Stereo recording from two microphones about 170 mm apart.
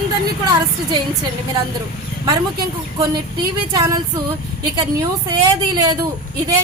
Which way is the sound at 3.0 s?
20° right (ahead or behind).